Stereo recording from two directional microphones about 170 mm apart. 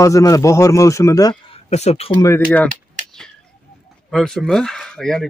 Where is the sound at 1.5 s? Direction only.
40° left (ahead or behind).